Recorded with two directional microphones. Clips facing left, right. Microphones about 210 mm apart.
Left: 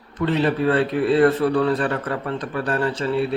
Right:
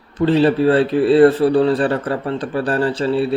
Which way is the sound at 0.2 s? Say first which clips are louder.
Right 6 dB; 30° right (ahead or behind).